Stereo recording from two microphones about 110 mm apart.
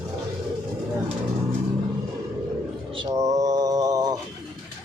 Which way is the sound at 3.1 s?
30° right (ahead or behind).